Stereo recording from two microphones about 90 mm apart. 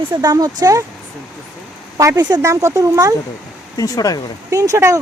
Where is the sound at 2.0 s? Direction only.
35° right (ahead or behind).